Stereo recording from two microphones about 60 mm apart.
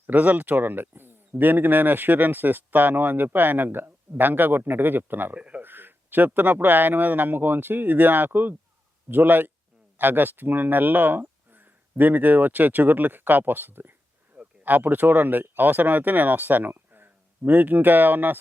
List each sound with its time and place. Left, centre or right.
0.1 s speech: right
5.4 s a sound: right
5.6 s speech: right